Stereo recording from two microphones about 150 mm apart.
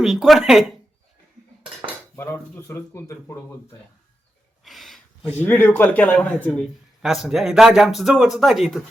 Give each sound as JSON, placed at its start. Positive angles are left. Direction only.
{"t": 0.0, "sound": "a man's voice", "side_deg": 0}
{"t": 2.1, "sound": "speech", "side_deg": 15}
{"t": 4.6, "sound": "a sound", "side_deg": 0}
{"t": 5.4, "sound": "speech", "side_deg": 10}
{"t": 7.0, "sound": "a man's voice", "side_deg": -5}